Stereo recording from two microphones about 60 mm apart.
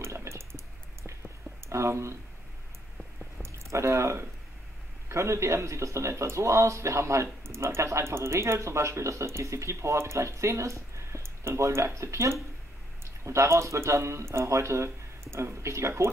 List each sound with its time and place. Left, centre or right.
0.0 s a sound: right
1.7 s speech: right
3.4 s speech: right